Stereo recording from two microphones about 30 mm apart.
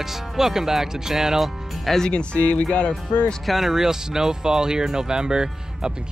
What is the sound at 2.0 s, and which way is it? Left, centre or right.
Speech, left.